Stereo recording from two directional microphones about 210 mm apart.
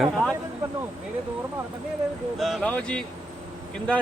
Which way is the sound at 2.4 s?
Centre (ahead or behind).